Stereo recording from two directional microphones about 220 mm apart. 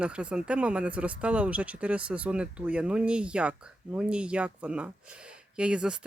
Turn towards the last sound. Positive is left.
turn(degrees=-5)  # may be behind; listen again after turning